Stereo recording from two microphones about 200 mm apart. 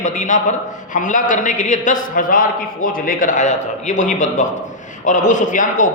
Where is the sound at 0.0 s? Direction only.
40° left (ahead or behind).